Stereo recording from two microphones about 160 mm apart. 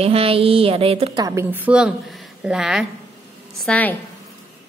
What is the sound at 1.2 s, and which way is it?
A woman's voice, 20° right (ahead or behind).